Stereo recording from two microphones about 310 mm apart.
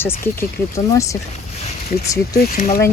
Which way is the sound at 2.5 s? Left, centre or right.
Left.